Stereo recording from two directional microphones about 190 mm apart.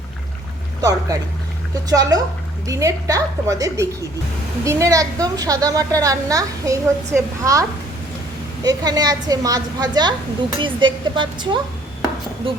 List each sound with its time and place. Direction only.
0.8 s a woman's voice: 20° right (ahead or behind)
8.6 s a woman's voice: 20° right (ahead or behind)